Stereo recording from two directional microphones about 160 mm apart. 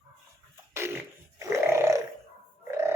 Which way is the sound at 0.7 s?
15° right (ahead or behind).